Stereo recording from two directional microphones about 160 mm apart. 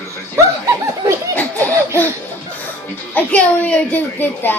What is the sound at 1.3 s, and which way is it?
Laughter, 10° left (ahead or behind).